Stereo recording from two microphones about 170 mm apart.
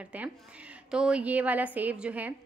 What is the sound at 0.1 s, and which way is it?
A woman's voice, 10° right (ahead or behind).